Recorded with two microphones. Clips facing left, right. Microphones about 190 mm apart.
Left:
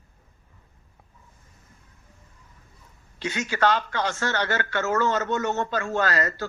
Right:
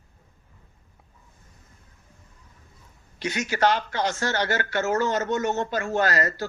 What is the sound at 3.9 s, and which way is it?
Speech, 40° right (ahead or behind).